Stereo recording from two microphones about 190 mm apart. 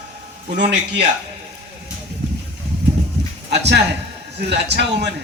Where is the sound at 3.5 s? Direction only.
65° right (ahead or behind).